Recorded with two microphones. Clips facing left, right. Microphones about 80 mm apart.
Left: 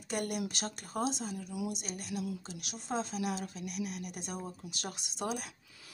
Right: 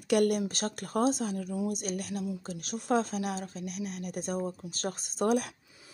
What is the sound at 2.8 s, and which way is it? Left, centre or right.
Speech, right.